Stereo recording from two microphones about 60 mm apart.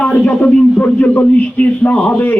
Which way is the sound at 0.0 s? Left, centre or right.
Left.